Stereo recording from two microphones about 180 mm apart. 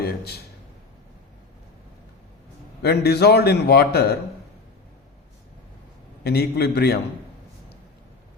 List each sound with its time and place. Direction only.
0.0 s a sound: 60° left (ahead or behind)
2.8 s a man's voice: 65° left (ahead or behind)
6.2 s a man's voice: 60° left (ahead or behind)